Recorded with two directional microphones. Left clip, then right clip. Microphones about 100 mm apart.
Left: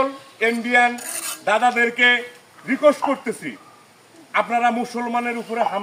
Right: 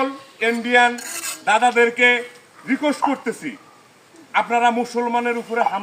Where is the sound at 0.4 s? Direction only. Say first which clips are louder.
Right 1 dB; 35° left (ahead or behind).